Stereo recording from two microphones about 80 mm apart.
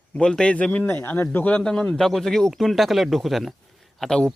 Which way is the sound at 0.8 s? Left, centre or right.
Left.